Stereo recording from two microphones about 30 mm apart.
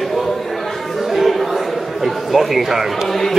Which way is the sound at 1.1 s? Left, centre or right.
Centre.